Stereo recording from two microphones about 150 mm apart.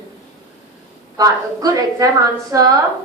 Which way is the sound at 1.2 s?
25° right (ahead or behind).